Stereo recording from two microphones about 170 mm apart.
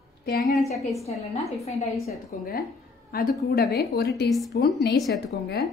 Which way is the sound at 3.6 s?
70° left (ahead or behind).